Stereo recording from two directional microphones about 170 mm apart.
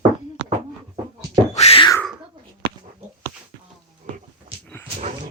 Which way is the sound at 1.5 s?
35° left (ahead or behind).